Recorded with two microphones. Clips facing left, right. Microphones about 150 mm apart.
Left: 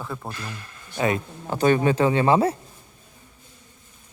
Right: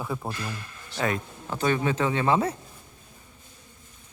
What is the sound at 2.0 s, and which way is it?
Speech, 35° left (ahead or behind).